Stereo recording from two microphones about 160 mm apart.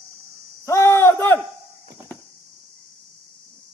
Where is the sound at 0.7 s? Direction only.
15° left (ahead or behind).